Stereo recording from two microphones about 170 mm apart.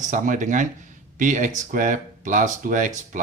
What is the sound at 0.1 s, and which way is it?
Speech, 45° right (ahead or behind).